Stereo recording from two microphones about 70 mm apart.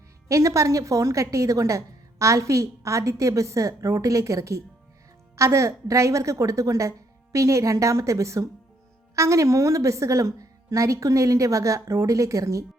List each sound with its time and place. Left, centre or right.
0.3 s a woman's voice: right